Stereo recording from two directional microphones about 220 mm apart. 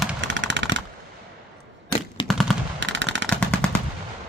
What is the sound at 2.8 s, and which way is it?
Fireworks, 55° right (ahead or behind).